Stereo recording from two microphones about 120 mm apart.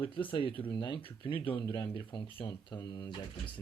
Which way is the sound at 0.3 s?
45° left (ahead or behind).